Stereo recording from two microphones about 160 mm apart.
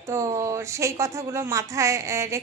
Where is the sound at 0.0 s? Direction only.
20° right (ahead or behind).